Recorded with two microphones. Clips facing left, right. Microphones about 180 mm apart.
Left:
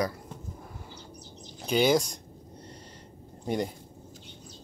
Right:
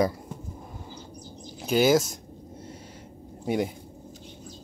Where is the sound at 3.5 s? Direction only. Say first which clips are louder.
Right 3 dB; 5° right (ahead or behind).